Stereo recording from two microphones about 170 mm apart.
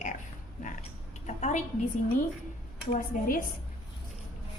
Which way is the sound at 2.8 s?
50° left (ahead or behind).